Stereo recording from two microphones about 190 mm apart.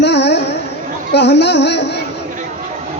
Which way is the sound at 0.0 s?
65° left (ahead or behind).